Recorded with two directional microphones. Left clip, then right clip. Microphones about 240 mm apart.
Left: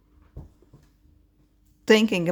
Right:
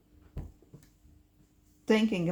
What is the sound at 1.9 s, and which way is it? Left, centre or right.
Speech, left.